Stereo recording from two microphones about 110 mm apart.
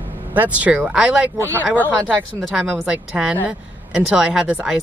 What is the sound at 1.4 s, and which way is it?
Speech, 25° right (ahead or behind).